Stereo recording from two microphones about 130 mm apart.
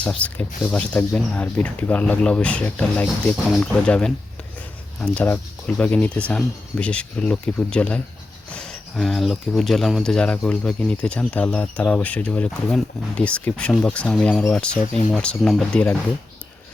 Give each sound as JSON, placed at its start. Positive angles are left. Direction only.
{"t": 0.0, "sound": "speech", "side_deg": 10}
{"t": 14.8, "sound": "speech", "side_deg": 65}
{"t": 15.1, "sound": "speech", "side_deg": 5}